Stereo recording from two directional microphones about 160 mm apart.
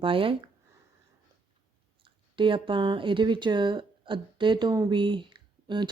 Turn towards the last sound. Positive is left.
turn(degrees=-30)  # may be behind; listen again after turning